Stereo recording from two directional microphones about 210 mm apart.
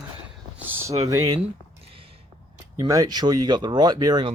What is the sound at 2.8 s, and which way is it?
Speech, 15° right (ahead or behind).